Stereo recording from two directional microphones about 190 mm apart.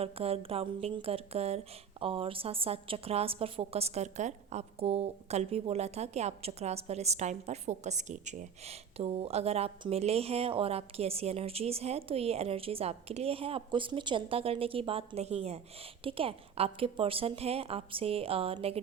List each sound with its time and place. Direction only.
0.0 s speech: 30° right (ahead or behind)